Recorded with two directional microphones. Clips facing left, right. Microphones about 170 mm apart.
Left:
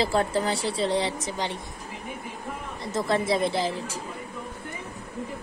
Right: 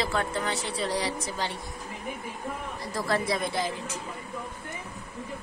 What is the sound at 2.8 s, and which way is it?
Speech, 20° left (ahead or behind).